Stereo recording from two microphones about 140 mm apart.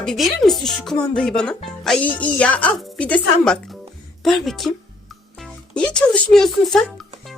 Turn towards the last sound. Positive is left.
turn(degrees=0)  # may be behind; listen again after turning